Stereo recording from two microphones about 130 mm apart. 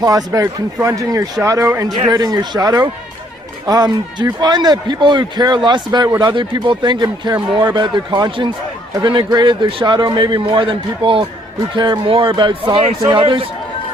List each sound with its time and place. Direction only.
0.0 s a man's voice: 30° right (ahead or behind)